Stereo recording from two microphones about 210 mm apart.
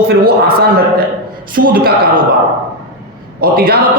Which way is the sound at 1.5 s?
40° right (ahead or behind).